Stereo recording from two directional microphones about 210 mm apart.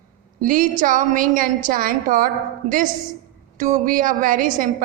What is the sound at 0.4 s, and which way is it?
A woman's voice, 40° right (ahead or behind).